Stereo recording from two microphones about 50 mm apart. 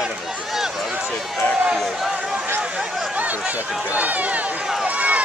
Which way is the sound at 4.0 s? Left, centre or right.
Right.